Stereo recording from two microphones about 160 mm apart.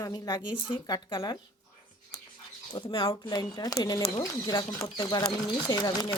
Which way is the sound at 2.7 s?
30° left (ahead or behind).